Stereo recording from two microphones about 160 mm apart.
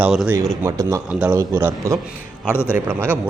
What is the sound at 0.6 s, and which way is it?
Speech, 20° right (ahead or behind).